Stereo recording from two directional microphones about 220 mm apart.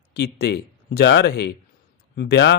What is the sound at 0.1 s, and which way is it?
Speech, 45° left (ahead or behind).